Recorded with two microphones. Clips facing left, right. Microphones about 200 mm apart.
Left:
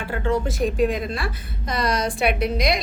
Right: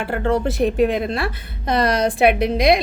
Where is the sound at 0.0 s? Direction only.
65° right (ahead or behind).